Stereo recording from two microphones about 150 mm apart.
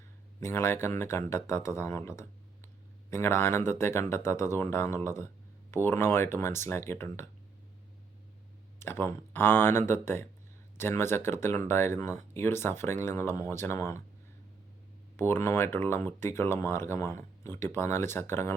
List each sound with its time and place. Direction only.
0.3 s speech: 15° left (ahead or behind)
8.8 s speech: 15° left (ahead or behind)
15.1 s speech: 15° left (ahead or behind)